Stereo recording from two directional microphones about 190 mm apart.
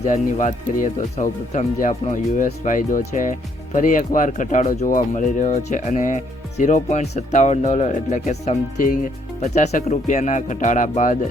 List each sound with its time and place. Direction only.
0.0 s speech: 40° left (ahead or behind)